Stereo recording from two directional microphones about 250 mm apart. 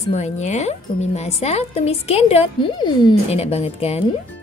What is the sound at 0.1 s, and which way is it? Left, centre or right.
Speech, left.